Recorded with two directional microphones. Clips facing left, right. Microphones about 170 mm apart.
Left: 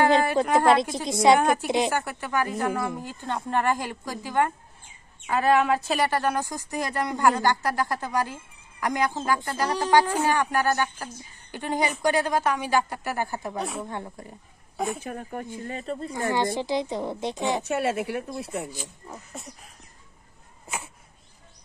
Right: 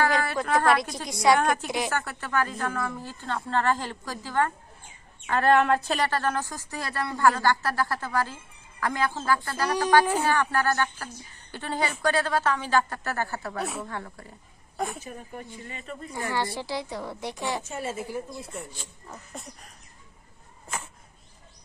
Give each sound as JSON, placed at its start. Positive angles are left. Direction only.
{"t": 0.0, "sound": "a woman's voice", "side_deg": 20}
{"t": 13.6, "sound": "a sound", "side_deg": 0}
{"t": 13.8, "sound": "a woman's voice", "side_deg": 20}
{"t": 15.0, "sound": "speech", "side_deg": 55}
{"t": 16.2, "sound": "a woman's voice", "side_deg": 20}
{"t": 17.6, "sound": "a woman's voice", "side_deg": 70}
{"t": 19.3, "sound": "a sound", "side_deg": 0}